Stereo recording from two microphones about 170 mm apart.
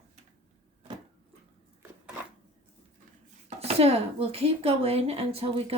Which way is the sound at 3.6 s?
35° right (ahead or behind).